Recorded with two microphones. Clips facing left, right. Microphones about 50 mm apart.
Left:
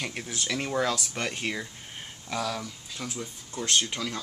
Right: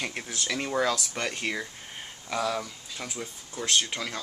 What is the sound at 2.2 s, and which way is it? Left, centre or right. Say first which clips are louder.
Speech: right 2 dB; centre.